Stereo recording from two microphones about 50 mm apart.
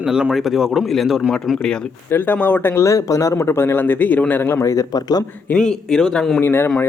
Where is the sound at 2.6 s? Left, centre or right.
Left.